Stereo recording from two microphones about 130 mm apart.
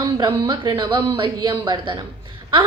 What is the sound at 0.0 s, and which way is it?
A woman's voice, 35° right (ahead or behind).